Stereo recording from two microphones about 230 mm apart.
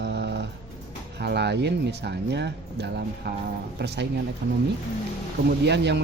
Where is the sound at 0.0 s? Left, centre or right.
Right.